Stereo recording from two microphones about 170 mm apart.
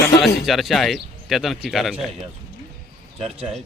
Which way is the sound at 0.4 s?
Centre (ahead or behind).